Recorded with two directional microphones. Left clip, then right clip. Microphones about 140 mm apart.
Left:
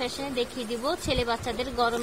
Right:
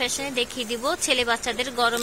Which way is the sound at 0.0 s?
Centre (ahead or behind).